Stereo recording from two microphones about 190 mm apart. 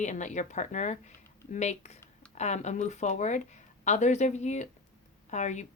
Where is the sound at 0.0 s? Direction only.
40° left (ahead or behind).